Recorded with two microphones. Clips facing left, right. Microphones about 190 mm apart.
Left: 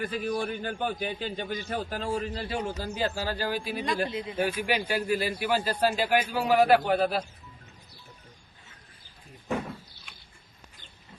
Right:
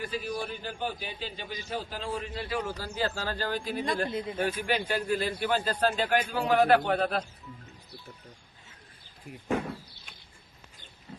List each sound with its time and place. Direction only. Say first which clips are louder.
0.0 s a man's voice: left 4 dB; 50° left (ahead or behind); by 7.3 s 5° left (ahead or behind)